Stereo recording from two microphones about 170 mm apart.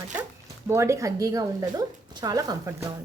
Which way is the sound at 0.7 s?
15° right (ahead or behind).